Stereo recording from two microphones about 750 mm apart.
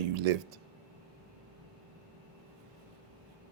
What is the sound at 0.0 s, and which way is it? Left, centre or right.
Speech, right.